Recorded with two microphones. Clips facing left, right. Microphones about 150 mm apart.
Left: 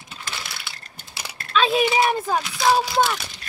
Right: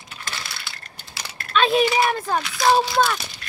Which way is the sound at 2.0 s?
5° left (ahead or behind).